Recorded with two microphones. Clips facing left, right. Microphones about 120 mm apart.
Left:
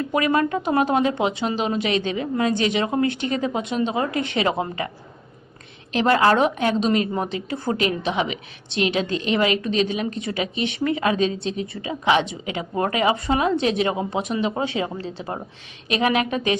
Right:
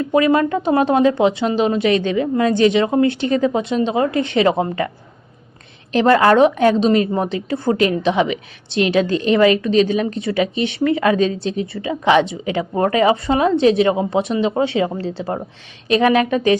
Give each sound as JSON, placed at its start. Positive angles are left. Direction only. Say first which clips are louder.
{"t": 0.1, "sound": "speech", "louder": "right 6 dB", "side_deg": -30}
{"t": 5.9, "sound": "speech", "louder": "right 5 dB", "side_deg": -40}